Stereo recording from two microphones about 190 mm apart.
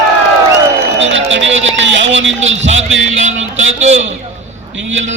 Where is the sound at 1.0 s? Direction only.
80° right.